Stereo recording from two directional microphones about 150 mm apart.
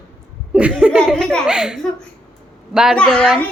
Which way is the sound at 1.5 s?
5° right (ahead or behind).